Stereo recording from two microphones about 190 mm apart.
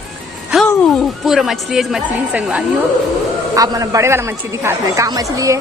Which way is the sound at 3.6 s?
15° right (ahead or behind).